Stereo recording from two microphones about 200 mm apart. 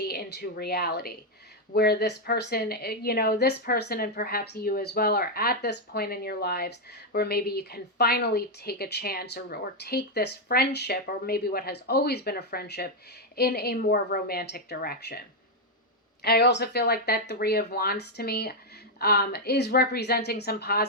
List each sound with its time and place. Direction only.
0.0 s a woman's voice: 50° left (ahead or behind)
16.2 s a woman's voice: 55° left (ahead or behind)